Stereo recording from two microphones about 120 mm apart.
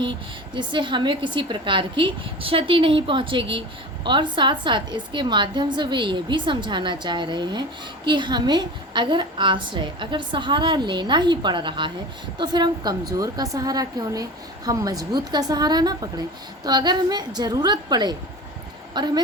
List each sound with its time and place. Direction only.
0.0 s a woman's voice: 40° right (ahead or behind)